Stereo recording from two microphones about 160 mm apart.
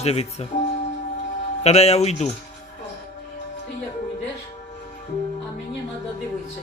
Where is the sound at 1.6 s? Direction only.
40° left (ahead or behind).